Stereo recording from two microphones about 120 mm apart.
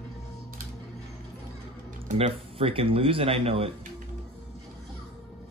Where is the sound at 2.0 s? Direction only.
55° right (ahead or behind).